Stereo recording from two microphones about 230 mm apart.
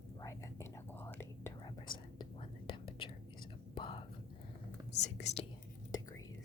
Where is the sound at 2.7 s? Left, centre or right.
Left.